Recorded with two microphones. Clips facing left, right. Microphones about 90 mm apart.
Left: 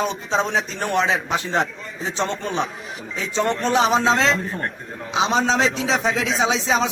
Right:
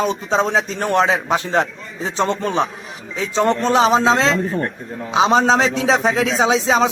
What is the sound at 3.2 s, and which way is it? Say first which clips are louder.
A man's voice: right 5 dB; 35° right (ahead or behind).